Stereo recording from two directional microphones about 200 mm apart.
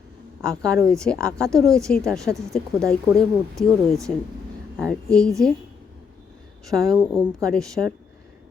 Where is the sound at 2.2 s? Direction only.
15° right (ahead or behind).